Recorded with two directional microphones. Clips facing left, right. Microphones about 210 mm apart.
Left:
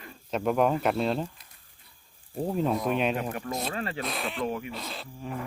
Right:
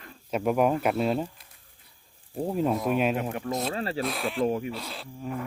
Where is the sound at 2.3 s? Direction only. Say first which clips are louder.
Right 1 dB; 5° right (ahead or behind).